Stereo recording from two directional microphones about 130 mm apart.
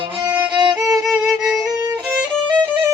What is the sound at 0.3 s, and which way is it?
Music, 35° right (ahead or behind).